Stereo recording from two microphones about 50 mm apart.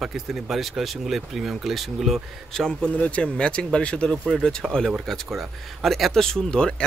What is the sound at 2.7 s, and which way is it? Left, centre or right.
Speech, left.